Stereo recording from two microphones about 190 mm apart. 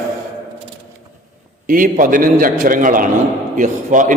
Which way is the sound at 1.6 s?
45° right (ahead or behind).